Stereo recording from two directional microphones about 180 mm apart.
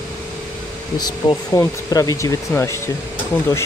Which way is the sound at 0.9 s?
20° left (ahead or behind).